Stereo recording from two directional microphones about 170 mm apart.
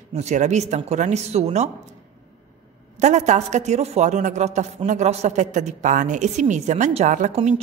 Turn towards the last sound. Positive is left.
turn(degrees=-45)  # may be behind; listen again after turning